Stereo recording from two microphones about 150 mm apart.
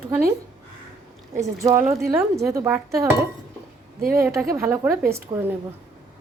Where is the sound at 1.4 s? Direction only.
20° right (ahead or behind).